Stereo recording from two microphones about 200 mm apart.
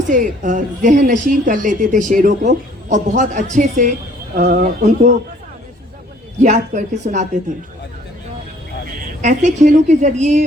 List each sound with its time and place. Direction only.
0.1 s a woman's voice: 40° right (ahead or behind)
6.4 s a woman's voice: 35° right (ahead or behind)
8.9 s a woman's voice: 40° right (ahead or behind)